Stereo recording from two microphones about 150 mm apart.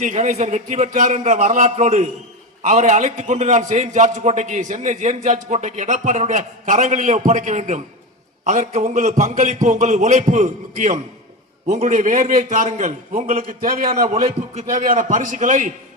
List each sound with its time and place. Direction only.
0.0 s a man's voice: 55° right (ahead or behind); by 14.1 s 75° right (ahead or behind)
14.1 s a man's voice: 45° right (ahead or behind)